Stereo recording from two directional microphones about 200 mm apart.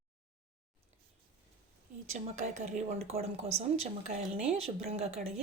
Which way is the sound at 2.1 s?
35° right (ahead or behind).